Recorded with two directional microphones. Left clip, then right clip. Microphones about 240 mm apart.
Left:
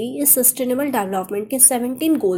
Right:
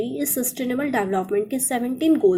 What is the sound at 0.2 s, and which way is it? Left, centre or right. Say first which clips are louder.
Speech: left 6 dB; left.